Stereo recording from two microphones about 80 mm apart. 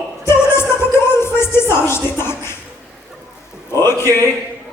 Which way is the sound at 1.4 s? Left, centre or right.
Left.